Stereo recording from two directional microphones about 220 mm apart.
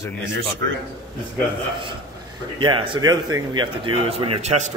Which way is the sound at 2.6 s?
25° right (ahead or behind).